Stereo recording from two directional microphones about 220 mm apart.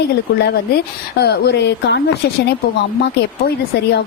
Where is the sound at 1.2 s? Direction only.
50° left (ahead or behind).